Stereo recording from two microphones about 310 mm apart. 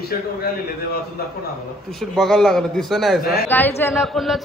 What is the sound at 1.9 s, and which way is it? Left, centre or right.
A man's voice, centre.